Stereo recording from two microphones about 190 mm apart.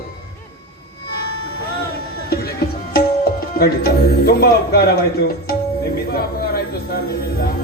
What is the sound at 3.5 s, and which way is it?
Speech, 55° left (ahead or behind).